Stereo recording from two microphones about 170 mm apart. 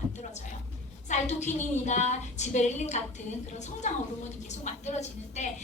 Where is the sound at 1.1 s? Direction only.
40° left (ahead or behind).